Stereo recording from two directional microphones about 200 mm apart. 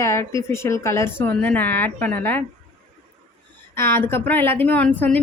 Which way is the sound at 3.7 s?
10° left (ahead or behind).